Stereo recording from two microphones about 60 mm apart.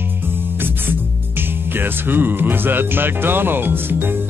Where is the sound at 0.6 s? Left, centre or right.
Right.